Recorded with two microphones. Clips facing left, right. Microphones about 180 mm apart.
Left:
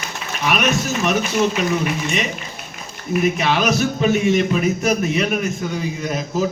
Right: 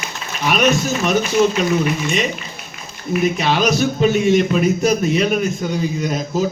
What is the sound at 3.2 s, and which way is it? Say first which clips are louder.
A man's voice: right 1 dB; 30° right (ahead or behind).